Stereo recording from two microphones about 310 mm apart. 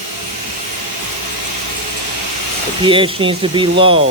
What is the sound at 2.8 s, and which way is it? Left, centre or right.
Speech, centre.